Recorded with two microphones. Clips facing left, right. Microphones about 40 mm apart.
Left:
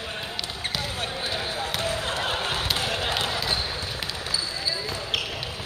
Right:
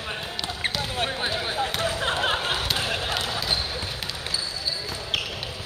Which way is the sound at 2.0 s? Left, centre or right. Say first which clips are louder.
Right 3 dB; right.